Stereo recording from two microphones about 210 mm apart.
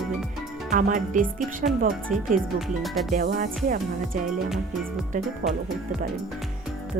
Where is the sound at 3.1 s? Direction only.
45° right (ahead or behind).